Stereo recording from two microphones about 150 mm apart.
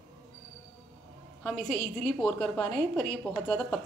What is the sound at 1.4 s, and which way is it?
A woman's voice, 5° left (ahead or behind).